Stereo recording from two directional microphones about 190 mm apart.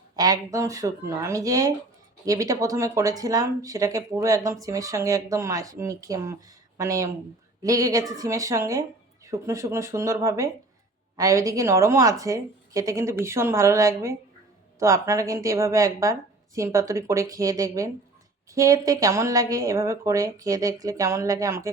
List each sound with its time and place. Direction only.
0.2 s speech: 20° right (ahead or behind)